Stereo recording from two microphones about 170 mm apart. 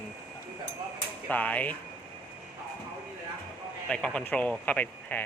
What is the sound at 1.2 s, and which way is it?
Speech, 10° left (ahead or behind).